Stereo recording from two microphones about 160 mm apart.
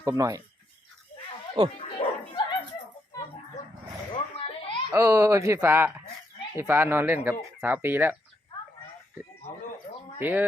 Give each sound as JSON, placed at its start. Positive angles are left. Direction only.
{"t": 0.0, "sound": "speech", "side_deg": -20}
{"t": 2.0, "sound": "bow-wow", "side_deg": 35}
{"t": 4.1, "sound": "a sound", "side_deg": 35}
{"t": 4.9, "sound": "speech", "side_deg": -20}
{"t": 10.2, "sound": "speech", "side_deg": -10}